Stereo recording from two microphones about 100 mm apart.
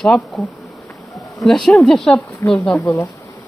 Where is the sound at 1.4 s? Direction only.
5° left (ahead or behind).